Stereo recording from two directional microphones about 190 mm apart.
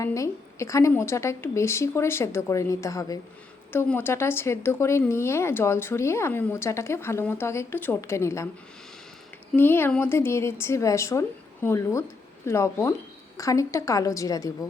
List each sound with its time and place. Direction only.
0.0 s a woman's voice: 15° left (ahead or behind)
9.6 s a woman's voice: 10° left (ahead or behind)